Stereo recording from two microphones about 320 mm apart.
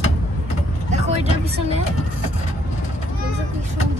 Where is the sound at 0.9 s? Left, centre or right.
Centre.